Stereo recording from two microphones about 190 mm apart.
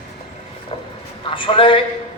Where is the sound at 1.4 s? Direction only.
25° left (ahead or behind).